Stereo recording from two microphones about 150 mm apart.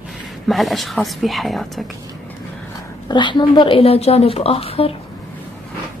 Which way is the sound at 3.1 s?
30° left (ahead or behind).